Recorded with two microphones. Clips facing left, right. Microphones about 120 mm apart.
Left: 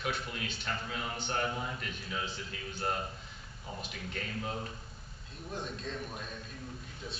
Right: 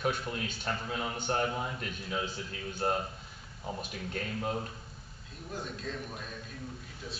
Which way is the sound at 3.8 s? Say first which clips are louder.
Right 3 dB; 40° right (ahead or behind).